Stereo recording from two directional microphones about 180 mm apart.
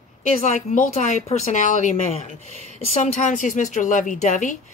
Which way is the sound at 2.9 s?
40° left (ahead or behind).